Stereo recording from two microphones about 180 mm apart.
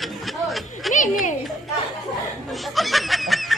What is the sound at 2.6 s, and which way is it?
Snicker, centre (ahead or behind).